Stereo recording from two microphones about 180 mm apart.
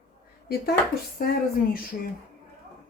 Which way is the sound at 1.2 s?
55° left (ahead or behind).